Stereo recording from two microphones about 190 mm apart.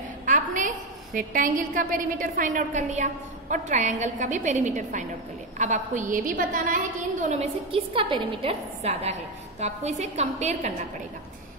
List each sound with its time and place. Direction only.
0.2 s a woman's voice: 40° right (ahead or behind)